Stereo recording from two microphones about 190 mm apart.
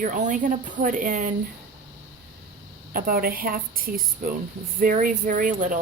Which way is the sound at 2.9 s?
50° right (ahead or behind).